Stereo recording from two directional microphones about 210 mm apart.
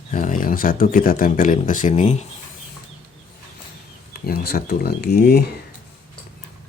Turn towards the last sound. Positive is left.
turn(degrees=45)  # may be behind; listen again after turning